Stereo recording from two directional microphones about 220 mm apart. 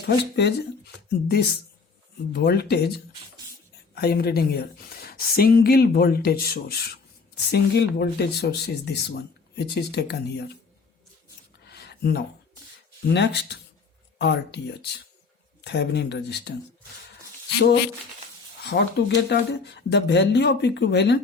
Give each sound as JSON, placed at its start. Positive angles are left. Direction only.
{"t": 0.4, "sound": "speech", "side_deg": 50}
{"t": 11.7, "sound": "a sound", "side_deg": 50}
{"t": 13.1, "sound": "speech", "side_deg": 50}
{"t": 17.6, "sound": "speech", "side_deg": 50}